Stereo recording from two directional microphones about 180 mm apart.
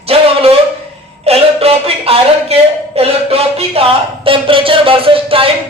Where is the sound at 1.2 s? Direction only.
35° right (ahead or behind).